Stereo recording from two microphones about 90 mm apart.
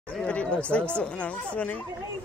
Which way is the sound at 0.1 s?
15° left (ahead or behind).